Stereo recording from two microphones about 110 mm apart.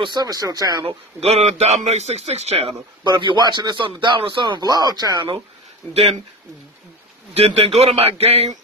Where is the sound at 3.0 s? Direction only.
45° right (ahead or behind).